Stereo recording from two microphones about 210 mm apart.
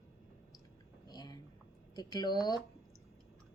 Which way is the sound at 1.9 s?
20° left (ahead or behind).